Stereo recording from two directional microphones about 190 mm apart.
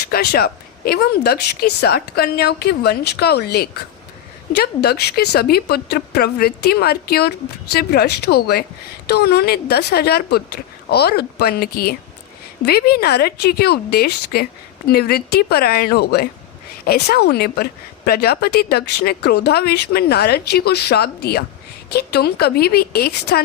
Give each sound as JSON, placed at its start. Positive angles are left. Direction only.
{"t": 0.1, "sound": "speech", "side_deg": 55}